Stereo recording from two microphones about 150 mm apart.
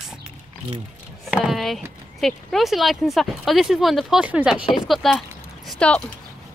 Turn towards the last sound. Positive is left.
turn(degrees=5)  # may be behind; listen again after turning